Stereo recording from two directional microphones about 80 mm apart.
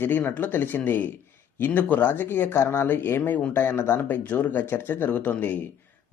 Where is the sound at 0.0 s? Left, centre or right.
Left.